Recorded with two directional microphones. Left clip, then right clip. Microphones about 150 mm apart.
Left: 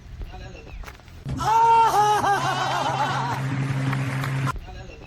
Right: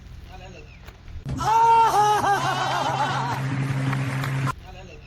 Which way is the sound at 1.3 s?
Centre (ahead or behind).